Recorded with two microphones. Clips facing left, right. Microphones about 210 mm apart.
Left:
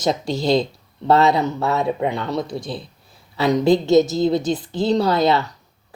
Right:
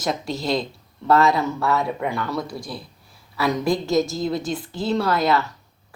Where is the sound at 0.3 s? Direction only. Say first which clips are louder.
Left 8 dB; centre (ahead or behind).